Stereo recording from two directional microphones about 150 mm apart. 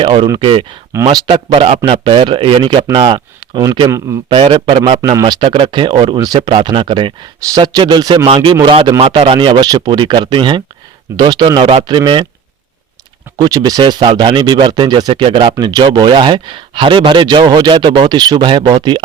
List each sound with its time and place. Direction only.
0.0 s speech: 35° right (ahead or behind)
4.3 s speech: 35° right (ahead or behind)
13.3 s speech: 25° right (ahead or behind)